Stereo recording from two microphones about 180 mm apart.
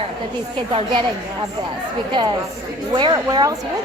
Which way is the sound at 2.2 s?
25° right (ahead or behind).